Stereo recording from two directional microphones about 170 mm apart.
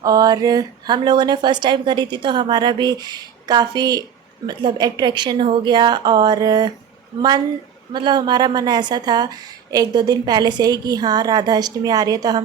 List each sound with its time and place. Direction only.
0.0 s a woman's voice: 20° right (ahead or behind)